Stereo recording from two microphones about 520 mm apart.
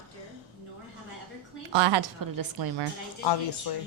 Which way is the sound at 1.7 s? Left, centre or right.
Right.